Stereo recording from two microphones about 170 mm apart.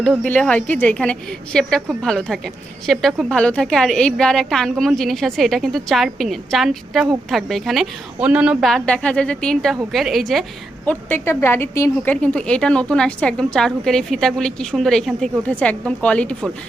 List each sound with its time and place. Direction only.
0.3 s a woman's voice: 10° left (ahead or behind)
10.8 s a woman's voice: 15° left (ahead or behind)